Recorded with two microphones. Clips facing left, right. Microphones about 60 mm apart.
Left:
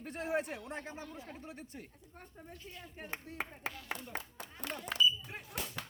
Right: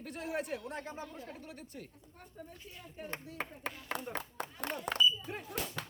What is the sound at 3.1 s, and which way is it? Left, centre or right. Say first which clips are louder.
Speech: even; centre.